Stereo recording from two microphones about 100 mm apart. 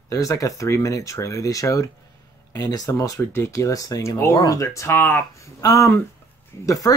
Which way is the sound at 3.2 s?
25° left (ahead or behind).